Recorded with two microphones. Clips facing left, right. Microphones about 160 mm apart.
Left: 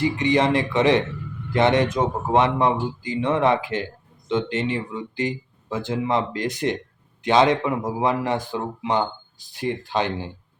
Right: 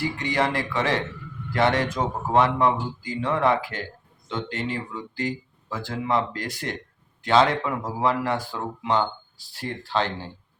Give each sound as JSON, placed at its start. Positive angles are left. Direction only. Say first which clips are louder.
{"t": 0.0, "sound": "a man's voice", "louder": "left 5 dB", "side_deg": 20}